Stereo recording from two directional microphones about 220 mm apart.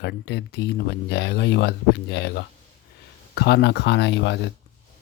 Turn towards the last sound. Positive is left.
turn(degrees=55)  # may be behind; listen again after turning